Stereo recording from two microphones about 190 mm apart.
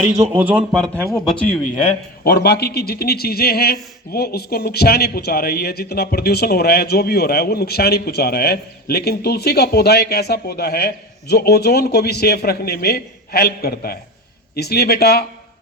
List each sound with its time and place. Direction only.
0.3 s a man's voice: 10° right (ahead or behind)
2.2 s a man's voice: 60° left (ahead or behind)